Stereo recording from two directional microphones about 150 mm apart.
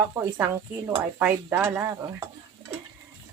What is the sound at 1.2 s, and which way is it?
Speech, 10° right (ahead or behind).